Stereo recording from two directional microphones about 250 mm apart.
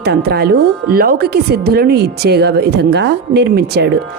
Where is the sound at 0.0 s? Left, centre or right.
Right.